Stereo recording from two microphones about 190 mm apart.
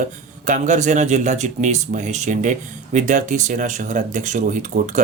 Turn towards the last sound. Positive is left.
turn(degrees=-40)  # may be behind; listen again after turning